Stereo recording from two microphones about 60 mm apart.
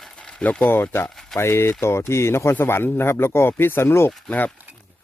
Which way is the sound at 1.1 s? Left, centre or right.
Centre.